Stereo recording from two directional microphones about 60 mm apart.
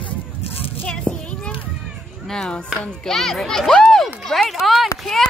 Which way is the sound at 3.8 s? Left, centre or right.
Centre.